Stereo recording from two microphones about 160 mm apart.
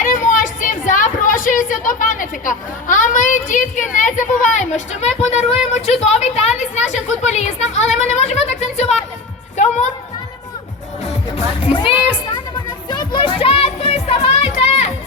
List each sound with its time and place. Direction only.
0.0 s a woman's voice: 55° left (ahead or behind)
11.0 s music: 40° left (ahead or behind)